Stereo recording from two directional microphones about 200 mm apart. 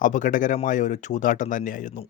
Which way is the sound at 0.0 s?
40° left (ahead or behind).